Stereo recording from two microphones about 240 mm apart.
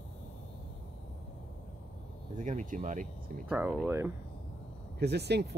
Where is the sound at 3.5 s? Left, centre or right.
Centre.